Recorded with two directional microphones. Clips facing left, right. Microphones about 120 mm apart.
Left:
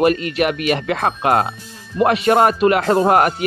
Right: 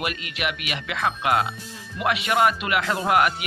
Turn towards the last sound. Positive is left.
turn(degrees=40)  # may be behind; listen again after turning